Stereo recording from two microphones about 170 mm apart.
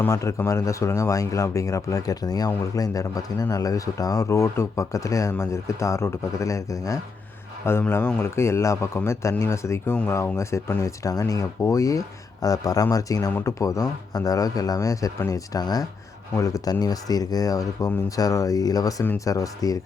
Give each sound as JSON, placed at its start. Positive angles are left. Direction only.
{"t": 0.0, "sound": "a man's voice", "side_deg": 15}